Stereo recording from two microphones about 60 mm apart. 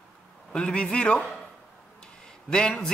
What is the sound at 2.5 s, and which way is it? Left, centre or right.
Speech, centre.